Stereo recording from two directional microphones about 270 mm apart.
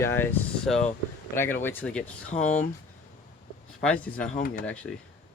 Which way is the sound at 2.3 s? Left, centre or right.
Left.